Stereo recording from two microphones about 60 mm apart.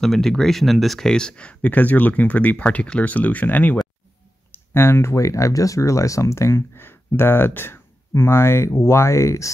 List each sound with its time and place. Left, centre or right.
0.0 s speech: centre; by 3.7 s left
4.5 s speech: left
6.8 s speech: left